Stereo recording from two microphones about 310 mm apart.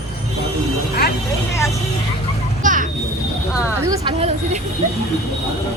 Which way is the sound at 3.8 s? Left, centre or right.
Centre.